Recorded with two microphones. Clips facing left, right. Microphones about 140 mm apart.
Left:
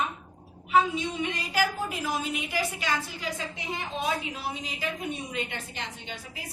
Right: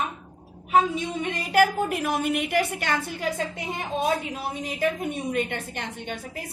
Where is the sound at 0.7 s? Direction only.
50° right (ahead or behind).